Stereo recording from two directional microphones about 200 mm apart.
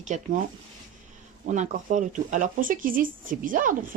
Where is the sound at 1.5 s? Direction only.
35° right (ahead or behind).